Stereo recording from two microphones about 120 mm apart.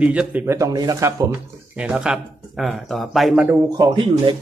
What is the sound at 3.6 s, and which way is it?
Speech, 35° right (ahead or behind).